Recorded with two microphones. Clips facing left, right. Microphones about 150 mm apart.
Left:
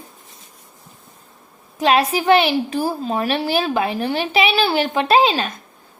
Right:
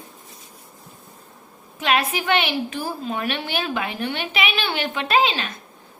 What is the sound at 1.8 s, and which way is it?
A woman's voice, 35° left (ahead or behind).